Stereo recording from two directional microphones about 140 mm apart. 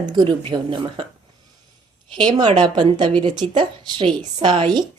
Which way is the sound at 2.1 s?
35° right (ahead or behind).